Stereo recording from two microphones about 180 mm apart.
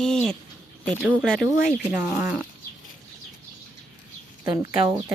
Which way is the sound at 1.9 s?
10° right (ahead or behind).